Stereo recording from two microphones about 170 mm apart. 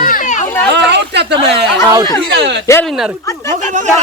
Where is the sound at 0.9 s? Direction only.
90° right.